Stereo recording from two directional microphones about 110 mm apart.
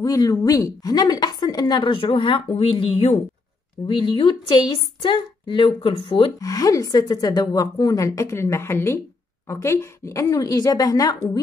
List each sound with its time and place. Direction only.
0.0 s a woman's voice: 35° left (ahead or behind); by 6.3 s 50° left (ahead or behind)
6.4 s a woman's voice: 35° left (ahead or behind)